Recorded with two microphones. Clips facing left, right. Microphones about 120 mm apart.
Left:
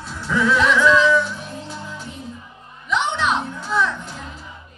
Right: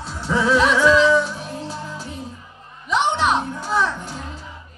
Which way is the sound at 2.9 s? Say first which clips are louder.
Right 2 dB; 35° right (ahead or behind).